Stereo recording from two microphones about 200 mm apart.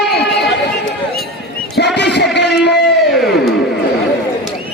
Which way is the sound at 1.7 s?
60° left (ahead or behind).